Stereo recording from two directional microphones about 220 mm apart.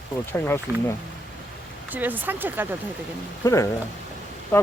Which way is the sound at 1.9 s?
10° right (ahead or behind).